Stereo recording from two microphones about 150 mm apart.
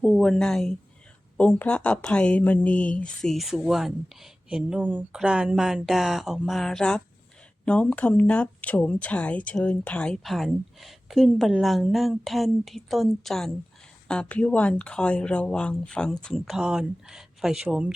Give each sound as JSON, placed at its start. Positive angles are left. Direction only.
{"t": 0.0, "sound": "speech", "side_deg": 0}